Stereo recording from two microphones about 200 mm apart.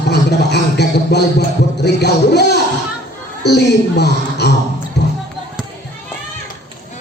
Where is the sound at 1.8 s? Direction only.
55° left (ahead or behind).